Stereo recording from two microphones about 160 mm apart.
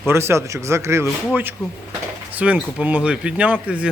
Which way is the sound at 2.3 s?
10° right (ahead or behind).